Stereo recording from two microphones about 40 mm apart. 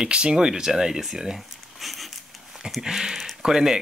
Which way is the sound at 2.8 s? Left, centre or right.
Centre.